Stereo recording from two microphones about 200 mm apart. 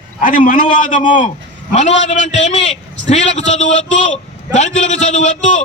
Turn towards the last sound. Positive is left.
turn(degrees=35)  # may be behind; listen again after turning